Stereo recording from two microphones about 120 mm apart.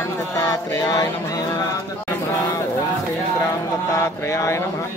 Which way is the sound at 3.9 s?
25° left (ahead or behind).